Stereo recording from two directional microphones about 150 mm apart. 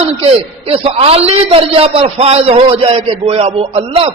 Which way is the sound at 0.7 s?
45° right (ahead or behind).